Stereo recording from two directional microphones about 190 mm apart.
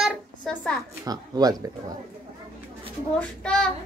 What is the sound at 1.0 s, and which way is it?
Speech, 20° right (ahead or behind).